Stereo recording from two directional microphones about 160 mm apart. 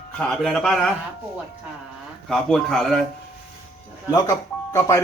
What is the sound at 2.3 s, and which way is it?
Speech, centre (ahead or behind).